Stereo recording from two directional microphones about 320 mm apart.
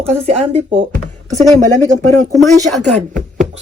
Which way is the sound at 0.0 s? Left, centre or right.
Centre.